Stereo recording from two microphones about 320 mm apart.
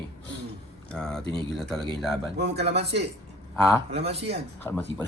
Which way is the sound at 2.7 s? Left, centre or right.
Right.